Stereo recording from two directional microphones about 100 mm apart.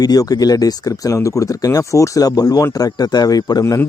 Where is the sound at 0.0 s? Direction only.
40° left (ahead or behind).